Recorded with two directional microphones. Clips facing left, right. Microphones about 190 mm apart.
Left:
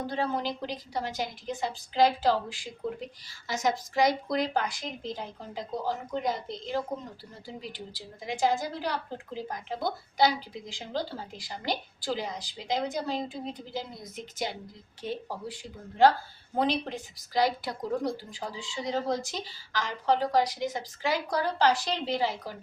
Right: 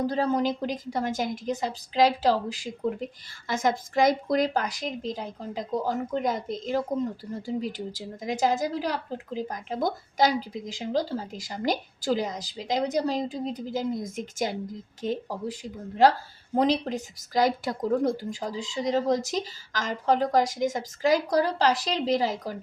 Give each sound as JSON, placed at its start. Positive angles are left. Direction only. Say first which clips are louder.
{"t": 0.0, "sound": "a woman's voice", "louder": "right 6 dB", "side_deg": -40}
{"t": 16.6, "sound": "a woman's voice", "louder": "right 4 dB", "side_deg": -40}